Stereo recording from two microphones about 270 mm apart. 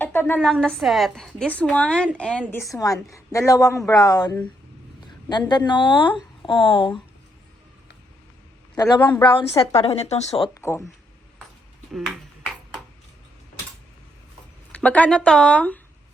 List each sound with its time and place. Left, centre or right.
0.0 s a sound: centre
0.3 s a woman's voice: centre
8.7 s a woman's voice: centre
11.9 s a woman's voice: centre
14.8 s a woman's voice: centre